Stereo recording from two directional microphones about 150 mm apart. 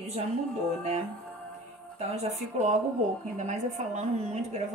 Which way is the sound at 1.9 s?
50° right (ahead or behind).